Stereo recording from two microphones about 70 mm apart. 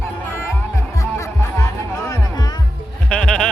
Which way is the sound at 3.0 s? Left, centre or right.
Centre.